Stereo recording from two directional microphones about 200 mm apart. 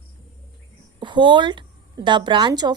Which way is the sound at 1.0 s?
25° right (ahead or behind).